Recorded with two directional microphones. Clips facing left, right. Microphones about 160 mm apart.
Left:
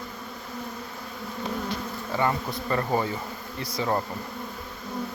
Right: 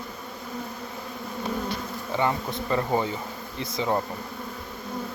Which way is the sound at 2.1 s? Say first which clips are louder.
Even; 20° right (ahead or behind).